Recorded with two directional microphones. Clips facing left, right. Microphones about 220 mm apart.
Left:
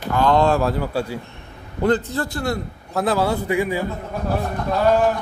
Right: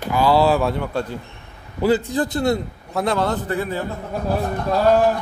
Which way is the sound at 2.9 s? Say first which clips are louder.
Left 1 dB; 5° left (ahead or behind).